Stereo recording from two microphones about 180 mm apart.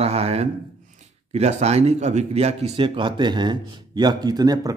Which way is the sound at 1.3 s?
35° right (ahead or behind).